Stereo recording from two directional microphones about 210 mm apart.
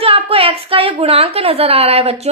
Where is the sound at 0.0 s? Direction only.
25° right (ahead or behind).